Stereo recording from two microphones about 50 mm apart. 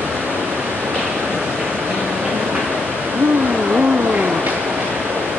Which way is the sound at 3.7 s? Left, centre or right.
Centre.